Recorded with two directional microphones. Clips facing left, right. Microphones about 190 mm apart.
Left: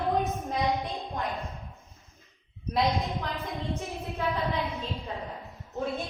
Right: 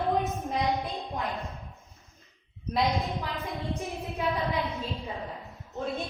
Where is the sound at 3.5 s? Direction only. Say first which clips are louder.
Even; 15° right (ahead or behind).